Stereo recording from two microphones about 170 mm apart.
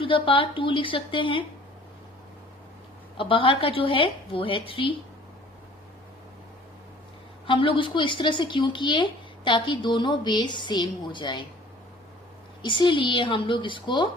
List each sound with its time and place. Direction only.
0.0 s a woman's voice: 30° left (ahead or behind)
3.2 s a woman's voice: 30° left (ahead or behind)
7.4 s speech: 30° left (ahead or behind)
12.6 s speech: 30° left (ahead or behind)